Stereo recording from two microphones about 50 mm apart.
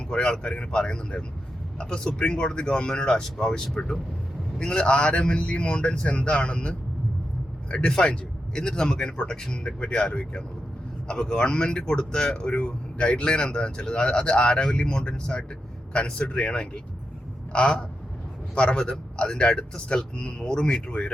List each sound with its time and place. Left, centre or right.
0.1 s a man's voice: centre
11.1 s a man's voice: centre
18.5 s a man's voice: left